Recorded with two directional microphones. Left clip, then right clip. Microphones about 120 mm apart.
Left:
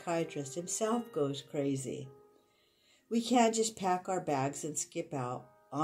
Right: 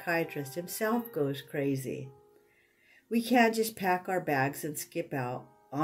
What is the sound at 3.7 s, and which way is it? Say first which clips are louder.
Speech: right 3 dB; centre (ahead or behind).